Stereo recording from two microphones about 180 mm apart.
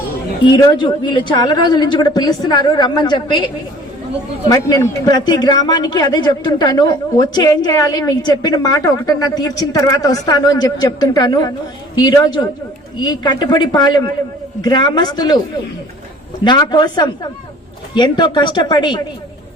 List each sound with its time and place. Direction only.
0.5 s speech: 25° left (ahead or behind)
4.4 s speech: 20° left (ahead or behind)
16.4 s speech: 25° left (ahead or behind)